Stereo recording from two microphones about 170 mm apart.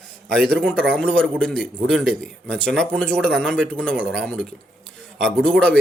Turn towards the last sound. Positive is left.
turn(degrees=5)  # may be behind; listen again after turning